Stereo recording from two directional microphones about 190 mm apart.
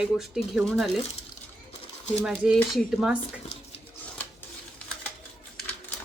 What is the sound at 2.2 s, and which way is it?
Speech, 5° right (ahead or behind).